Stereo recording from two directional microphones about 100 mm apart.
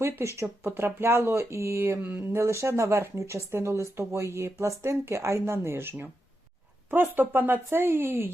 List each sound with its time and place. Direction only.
0.0 s speech: 30° right (ahead or behind)